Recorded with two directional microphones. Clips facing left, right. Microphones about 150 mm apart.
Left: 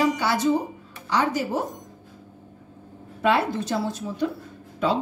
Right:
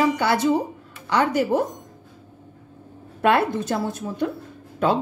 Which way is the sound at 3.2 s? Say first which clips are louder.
Right 3 dB; 55° right (ahead or behind).